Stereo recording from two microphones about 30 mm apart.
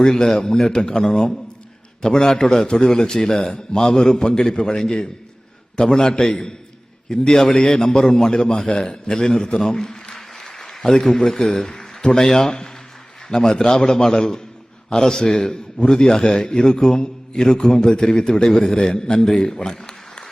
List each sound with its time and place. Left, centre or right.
0.0 s a man's voice: left
2.6 s a man's voice: left
9.6 s applause: left
11.0 s a man's voice: centre